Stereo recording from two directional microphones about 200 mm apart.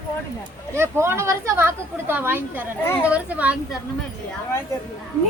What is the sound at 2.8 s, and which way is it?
Speech, 10° left (ahead or behind).